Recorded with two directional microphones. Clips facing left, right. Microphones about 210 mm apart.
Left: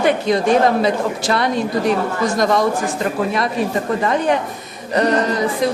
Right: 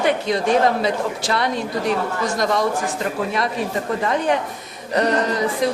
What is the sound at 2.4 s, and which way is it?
Speech, 45° left (ahead or behind).